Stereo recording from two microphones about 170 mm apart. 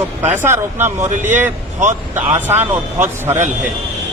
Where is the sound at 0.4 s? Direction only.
15° right (ahead or behind).